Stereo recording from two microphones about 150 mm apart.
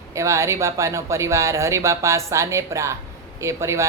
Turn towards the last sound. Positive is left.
turn(degrees=-20)  # may be behind; listen again after turning